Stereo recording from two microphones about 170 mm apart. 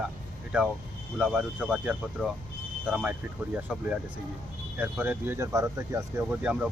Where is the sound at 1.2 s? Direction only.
5° right (ahead or behind).